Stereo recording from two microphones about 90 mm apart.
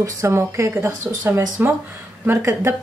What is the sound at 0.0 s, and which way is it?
Speech, 30° right (ahead or behind).